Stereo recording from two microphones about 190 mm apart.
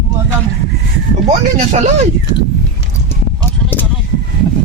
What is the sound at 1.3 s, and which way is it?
Speech, 40° right (ahead or behind).